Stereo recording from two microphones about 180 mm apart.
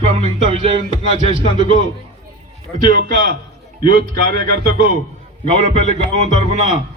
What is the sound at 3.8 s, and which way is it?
A man's voice, 55° right (ahead or behind).